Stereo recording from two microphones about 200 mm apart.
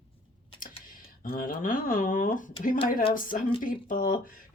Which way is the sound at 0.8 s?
45° left (ahead or behind).